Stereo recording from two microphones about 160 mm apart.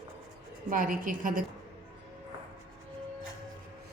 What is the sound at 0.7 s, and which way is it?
Speech, 60° right (ahead or behind).